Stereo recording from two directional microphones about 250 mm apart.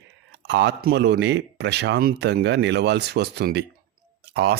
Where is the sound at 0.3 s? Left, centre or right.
Right.